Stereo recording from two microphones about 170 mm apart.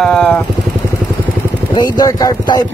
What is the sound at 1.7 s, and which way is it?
Speech, 20° left (ahead or behind).